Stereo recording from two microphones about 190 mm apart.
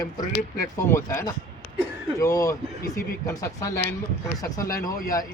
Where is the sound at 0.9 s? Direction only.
15° left (ahead or behind).